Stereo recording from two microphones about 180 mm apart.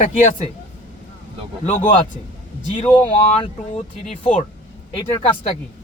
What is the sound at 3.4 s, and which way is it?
Speech, 40° left (ahead or behind).